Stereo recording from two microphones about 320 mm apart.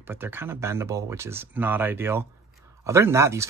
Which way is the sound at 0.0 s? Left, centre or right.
Centre.